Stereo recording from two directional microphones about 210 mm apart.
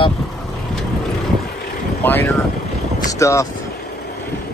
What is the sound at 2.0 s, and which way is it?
Speech, 10° left (ahead or behind).